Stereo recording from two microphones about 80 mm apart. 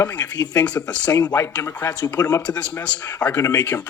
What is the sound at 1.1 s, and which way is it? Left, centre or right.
Speech, left.